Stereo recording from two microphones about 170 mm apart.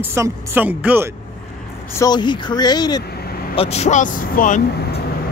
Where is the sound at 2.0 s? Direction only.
25° left (ahead or behind).